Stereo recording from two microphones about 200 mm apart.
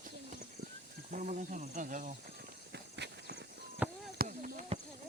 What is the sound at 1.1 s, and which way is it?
Speech, 40° right (ahead or behind).